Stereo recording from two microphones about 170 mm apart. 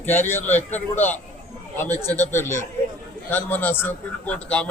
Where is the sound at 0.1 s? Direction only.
15° left (ahead or behind).